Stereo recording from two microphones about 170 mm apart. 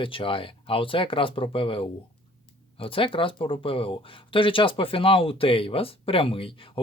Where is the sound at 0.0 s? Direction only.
30° left (ahead or behind).